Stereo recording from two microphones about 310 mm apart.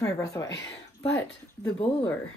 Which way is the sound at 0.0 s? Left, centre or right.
Centre.